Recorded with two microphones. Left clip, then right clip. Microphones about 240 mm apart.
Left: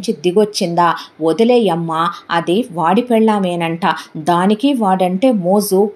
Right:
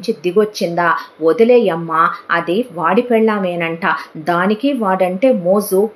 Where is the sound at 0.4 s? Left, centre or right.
Left.